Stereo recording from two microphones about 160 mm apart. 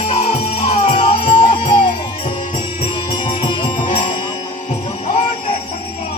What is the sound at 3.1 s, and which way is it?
Music, 30° left (ahead or behind).